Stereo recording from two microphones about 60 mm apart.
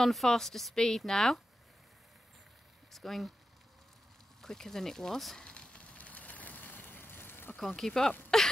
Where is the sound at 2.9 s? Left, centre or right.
Centre.